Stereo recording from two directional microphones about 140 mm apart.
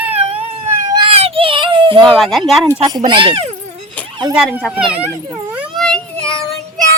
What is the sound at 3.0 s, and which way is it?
Speech, 35° right (ahead or behind).